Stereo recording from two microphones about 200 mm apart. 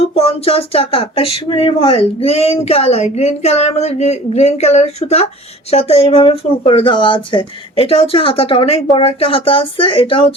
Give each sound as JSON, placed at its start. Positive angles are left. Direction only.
{"t": 0.1, "sound": "speech", "side_deg": 30}